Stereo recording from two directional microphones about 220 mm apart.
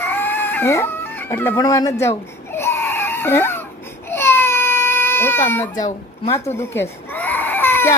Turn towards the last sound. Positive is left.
turn(degrees=10)  # may be behind; listen again after turning